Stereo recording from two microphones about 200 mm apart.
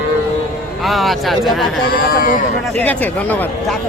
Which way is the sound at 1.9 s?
45° left (ahead or behind).